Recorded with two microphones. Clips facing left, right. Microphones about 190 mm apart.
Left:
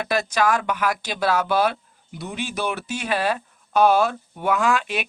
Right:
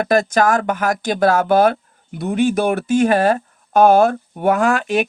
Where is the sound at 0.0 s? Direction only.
50° right (ahead or behind).